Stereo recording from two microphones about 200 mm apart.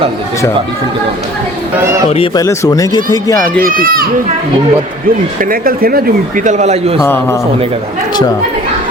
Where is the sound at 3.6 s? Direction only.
45° right (ahead or behind).